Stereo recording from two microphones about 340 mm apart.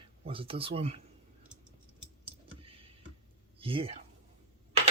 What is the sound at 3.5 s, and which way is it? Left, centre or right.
Speech, centre.